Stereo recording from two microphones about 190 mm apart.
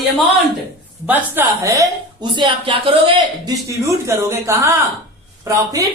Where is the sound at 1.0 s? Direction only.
10° right (ahead or behind).